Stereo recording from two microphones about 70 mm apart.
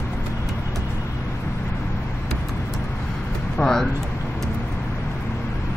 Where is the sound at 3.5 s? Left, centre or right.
Centre.